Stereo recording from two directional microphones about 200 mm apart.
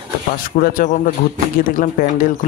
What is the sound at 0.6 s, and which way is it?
Speech, 45° left (ahead or behind).